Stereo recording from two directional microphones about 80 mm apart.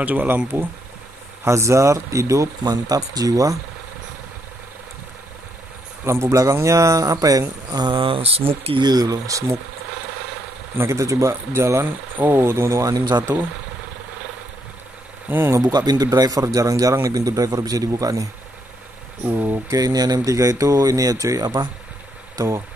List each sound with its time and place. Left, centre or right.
0.0 s speech: centre
1.4 s speech: right
2.6 s speech: right
6.0 s speech: right
8.7 s speech: right
10.8 s speech: right
15.2 s speech: right
15.6 s speech: right
19.2 s speech: right
19.7 s speech: right